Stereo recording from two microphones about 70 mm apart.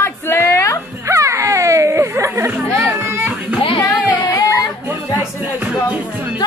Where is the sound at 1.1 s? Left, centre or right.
Right.